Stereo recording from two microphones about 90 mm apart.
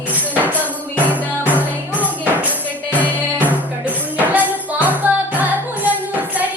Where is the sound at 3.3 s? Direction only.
20° right (ahead or behind).